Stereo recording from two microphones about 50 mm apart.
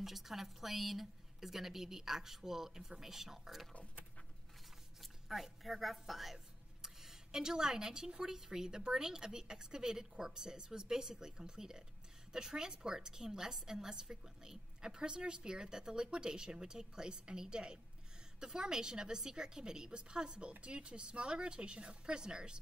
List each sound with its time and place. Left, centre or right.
0.0 s speech: centre
5.0 s a woman's voice: centre